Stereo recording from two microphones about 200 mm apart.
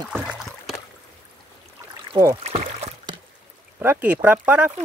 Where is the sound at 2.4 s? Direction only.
30° right (ahead or behind).